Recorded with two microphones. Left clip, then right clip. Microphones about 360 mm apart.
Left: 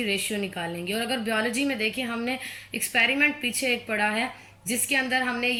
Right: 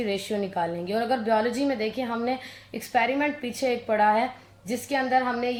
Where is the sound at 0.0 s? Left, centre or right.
Centre.